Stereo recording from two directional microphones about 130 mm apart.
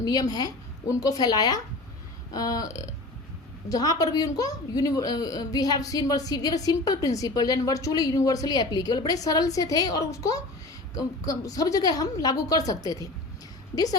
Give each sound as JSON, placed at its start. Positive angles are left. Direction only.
{"t": 0.0, "sound": "a woman's voice", "side_deg": 30}